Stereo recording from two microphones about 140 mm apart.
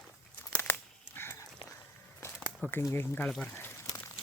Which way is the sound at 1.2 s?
15° left (ahead or behind).